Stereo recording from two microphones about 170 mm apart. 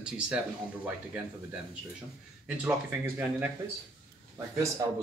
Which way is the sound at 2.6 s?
15° right (ahead or behind).